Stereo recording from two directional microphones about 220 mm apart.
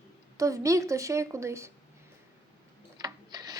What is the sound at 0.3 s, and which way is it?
A woman's voice, 15° right (ahead or behind).